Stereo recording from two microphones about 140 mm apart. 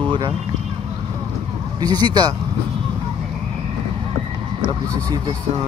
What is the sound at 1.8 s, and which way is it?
Speech, 30° right (ahead or behind).